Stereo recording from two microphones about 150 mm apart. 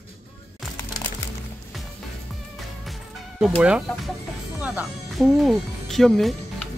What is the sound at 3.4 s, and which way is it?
Speech, 5° right (ahead or behind).